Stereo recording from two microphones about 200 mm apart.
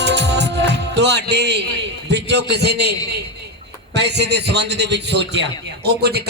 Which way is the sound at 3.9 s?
60° right (ahead or behind).